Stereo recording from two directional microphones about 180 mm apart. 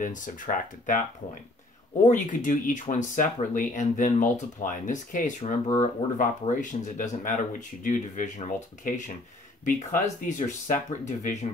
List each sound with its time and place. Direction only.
0.0 s speech: 45° left (ahead or behind)
2.0 s speech: 45° left (ahead or behind)